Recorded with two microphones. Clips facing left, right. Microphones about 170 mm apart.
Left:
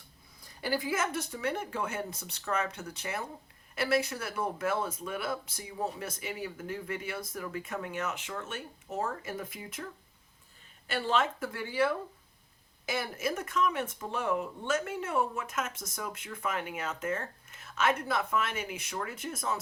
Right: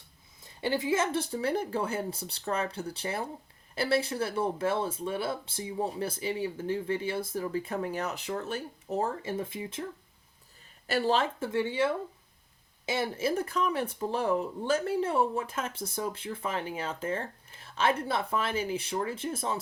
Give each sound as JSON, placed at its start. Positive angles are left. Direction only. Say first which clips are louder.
{"t": 0.4, "sound": "speech", "louder": "right 3 dB", "side_deg": -25}
{"t": 10.8, "sound": "speech", "louder": "right 3 dB", "side_deg": -40}